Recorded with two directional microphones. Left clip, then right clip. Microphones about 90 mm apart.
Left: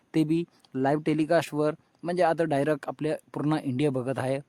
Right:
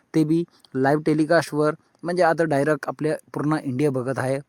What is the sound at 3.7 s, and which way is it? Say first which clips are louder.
Speech: right 4 dB; 20° right (ahead or behind).